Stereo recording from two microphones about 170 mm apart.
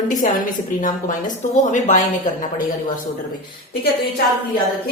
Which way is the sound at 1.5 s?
45° left (ahead or behind).